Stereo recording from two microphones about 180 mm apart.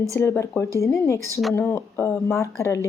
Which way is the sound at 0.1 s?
15° left (ahead or behind).